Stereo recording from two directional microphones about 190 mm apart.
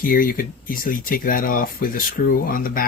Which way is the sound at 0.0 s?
50° left (ahead or behind).